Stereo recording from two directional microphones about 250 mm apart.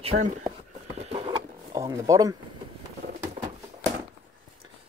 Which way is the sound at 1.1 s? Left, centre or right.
Right.